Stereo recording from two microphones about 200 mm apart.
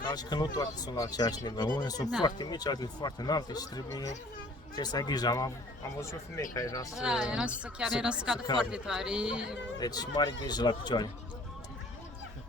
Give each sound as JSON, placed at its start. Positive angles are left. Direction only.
{"t": 0.0, "sound": "speech", "side_deg": 20}
{"t": 6.9, "sound": "a woman's voice", "side_deg": -5}
{"t": 9.7, "sound": "speech", "side_deg": 20}